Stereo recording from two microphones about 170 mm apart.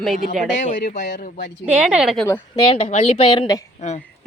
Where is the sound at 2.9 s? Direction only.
35° left (ahead or behind).